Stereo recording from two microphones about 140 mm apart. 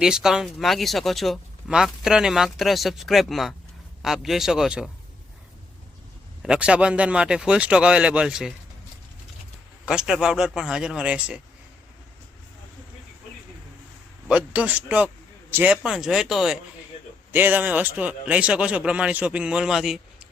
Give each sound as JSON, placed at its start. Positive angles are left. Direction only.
{"t": 0.0, "sound": "speech", "side_deg": -5}
{"t": 6.4, "sound": "speech", "side_deg": -5}
{"t": 9.8, "sound": "speech", "side_deg": -5}
{"t": 14.3, "sound": "speech", "side_deg": -10}
{"t": 17.3, "sound": "speech", "side_deg": -15}